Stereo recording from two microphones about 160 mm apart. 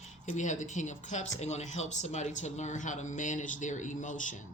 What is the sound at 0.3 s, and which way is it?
Speech, 50° left (ahead or behind).